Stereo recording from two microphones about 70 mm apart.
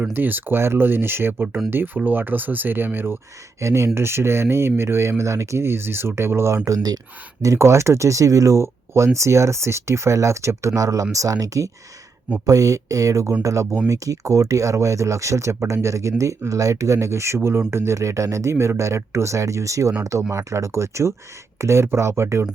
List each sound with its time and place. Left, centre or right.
0.1 s speech: right
3.6 s speech: right
18.5 s speech: right